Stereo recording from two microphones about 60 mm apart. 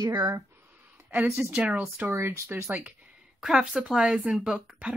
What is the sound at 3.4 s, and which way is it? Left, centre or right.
Speech, centre.